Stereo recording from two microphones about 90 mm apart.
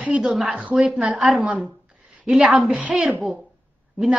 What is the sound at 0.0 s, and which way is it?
A woman's voice, 15° right (ahead or behind).